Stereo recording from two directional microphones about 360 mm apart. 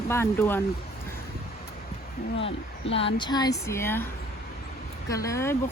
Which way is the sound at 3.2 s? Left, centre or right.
Centre.